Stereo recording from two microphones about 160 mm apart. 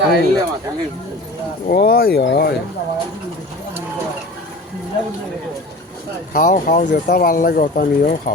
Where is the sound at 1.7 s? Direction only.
75° left (ahead or behind).